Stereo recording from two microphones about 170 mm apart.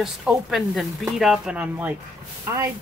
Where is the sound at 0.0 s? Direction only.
5° right (ahead or behind).